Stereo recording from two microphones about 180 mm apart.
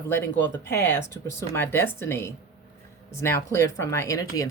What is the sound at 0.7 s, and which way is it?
Speech, 15° left (ahead or behind).